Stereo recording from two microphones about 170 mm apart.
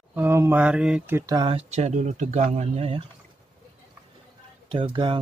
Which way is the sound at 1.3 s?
30° right (ahead or behind).